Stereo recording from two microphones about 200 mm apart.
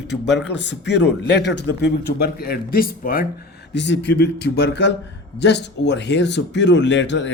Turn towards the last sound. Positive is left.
turn(degrees=65)  # may be behind; listen again after turning